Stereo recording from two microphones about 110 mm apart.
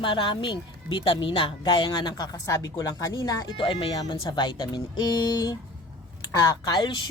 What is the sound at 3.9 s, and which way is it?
A woman's voice, 40° left (ahead or behind).